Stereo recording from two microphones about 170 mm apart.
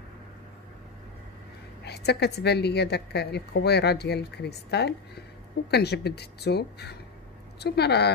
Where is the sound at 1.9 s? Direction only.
75° left (ahead or behind).